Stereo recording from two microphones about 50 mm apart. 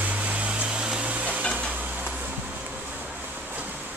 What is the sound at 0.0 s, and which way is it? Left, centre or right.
Music, right.